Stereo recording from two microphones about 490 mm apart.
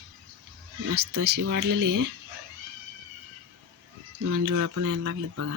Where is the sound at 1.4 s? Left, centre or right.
Right.